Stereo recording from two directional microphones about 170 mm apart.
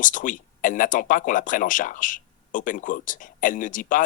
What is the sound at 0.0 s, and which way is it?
Speech, 50° left (ahead or behind).